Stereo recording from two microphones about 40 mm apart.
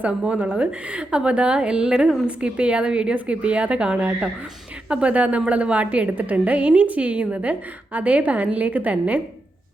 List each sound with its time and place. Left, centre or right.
0.1 s a woman's voice: right
6.1 s a woman's voice: right